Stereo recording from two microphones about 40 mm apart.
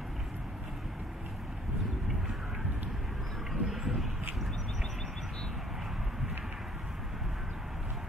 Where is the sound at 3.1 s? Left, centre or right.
Centre.